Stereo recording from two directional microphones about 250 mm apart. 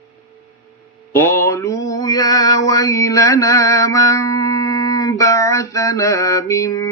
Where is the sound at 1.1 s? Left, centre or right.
Centre.